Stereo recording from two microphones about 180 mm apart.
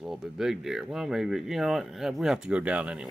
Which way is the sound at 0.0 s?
5° right (ahead or behind).